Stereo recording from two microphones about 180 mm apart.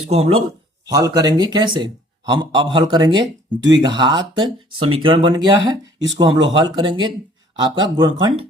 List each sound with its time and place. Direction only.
0.0 s a man's voice: 35° right (ahead or behind)
0.9 s speech: 20° right (ahead or behind)